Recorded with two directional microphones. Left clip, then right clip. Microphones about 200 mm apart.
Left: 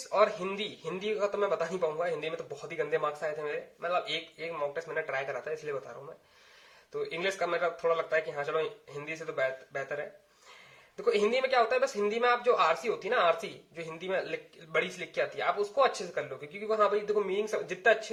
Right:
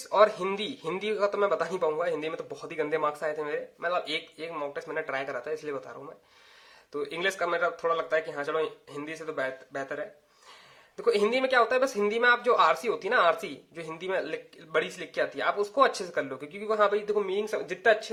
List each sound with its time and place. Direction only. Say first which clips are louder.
0.1 s a man's voice: right 4 dB; 40° right (ahead or behind)
6.9 s a man's voice: right 3 dB; 30° right (ahead or behind)